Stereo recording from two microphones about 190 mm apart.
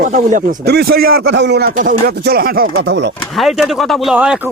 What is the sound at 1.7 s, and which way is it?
Speech, 45° right (ahead or behind).